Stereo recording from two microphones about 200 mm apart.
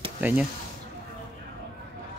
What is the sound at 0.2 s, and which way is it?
Speech, 10° right (ahead or behind).